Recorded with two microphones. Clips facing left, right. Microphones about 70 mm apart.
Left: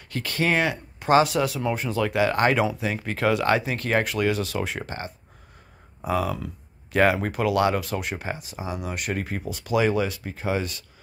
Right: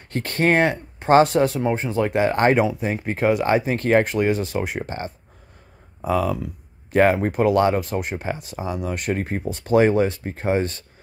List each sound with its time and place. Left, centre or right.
0.1 s speech: right
3.6 s speech: right
6.9 s speech: right
8.4 s speech: right